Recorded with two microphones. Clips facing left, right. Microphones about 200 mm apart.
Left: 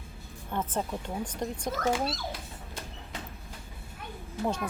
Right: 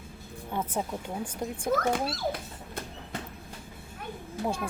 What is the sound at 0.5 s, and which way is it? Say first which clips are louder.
Speech: even; 10° right (ahead or behind).